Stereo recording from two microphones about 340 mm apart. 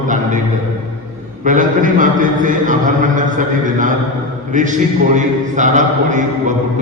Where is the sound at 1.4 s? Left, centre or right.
Right.